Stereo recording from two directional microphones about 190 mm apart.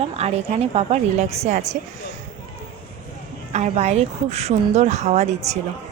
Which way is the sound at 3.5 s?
35° right (ahead or behind).